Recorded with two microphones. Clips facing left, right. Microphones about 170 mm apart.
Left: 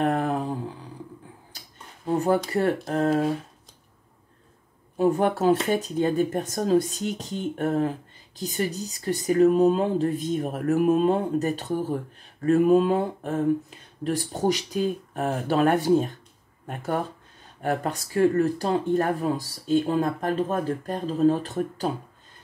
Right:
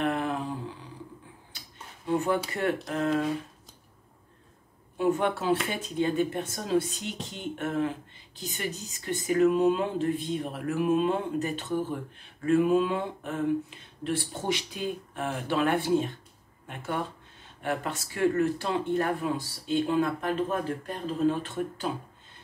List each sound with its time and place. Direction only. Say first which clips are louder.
0.0 s a sound: left 4 dB; 40° left (ahead or behind)
2.0 s speech: left 4 dB; 40° left (ahead or behind)
4.9 s speech: left 4 dB; 40° left (ahead or behind)